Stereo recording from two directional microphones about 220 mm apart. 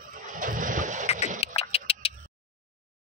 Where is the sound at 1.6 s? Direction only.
25° left (ahead or behind).